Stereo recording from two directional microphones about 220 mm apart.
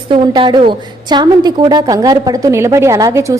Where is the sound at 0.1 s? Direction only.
20° right (ahead or behind).